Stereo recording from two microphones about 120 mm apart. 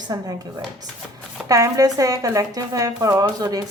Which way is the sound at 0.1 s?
35° right (ahead or behind).